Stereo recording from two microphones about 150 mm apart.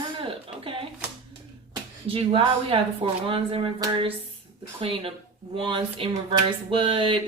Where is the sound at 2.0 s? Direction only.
40° right (ahead or behind).